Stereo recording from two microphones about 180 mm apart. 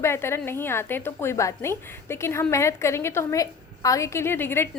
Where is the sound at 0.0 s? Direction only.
15° left (ahead or behind).